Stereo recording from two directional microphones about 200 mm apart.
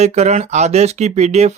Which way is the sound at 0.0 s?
35° right (ahead or behind).